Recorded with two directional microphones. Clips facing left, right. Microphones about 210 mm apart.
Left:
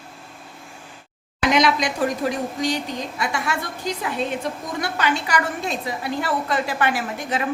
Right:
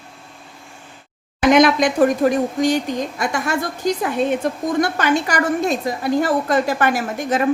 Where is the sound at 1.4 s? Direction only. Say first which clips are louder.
Right 6 dB; 50° right (ahead or behind).